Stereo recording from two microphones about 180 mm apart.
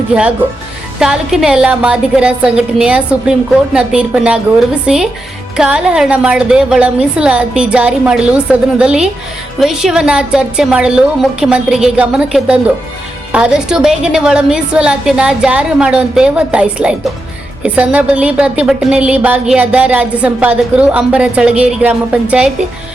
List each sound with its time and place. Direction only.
0.1 s a woman's voice: 5° right (ahead or behind)